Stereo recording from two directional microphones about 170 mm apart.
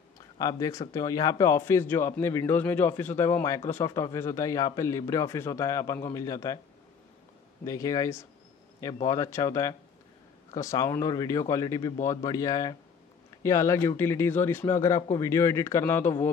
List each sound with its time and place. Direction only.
0.4 s speech: 20° left (ahead or behind)
7.6 s speech: 20° left (ahead or behind)